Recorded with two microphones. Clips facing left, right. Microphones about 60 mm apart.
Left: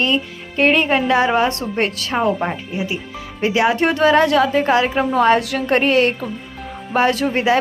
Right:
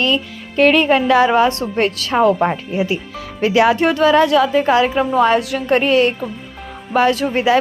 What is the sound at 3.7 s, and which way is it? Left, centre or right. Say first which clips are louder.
A woman's voice: right 1 dB; left.